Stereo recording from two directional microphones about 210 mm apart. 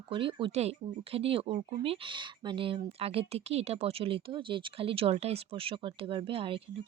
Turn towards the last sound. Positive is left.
turn(degrees=-25)  # may be behind; listen again after turning